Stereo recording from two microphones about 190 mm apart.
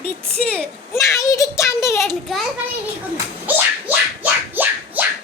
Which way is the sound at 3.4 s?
10° right (ahead or behind).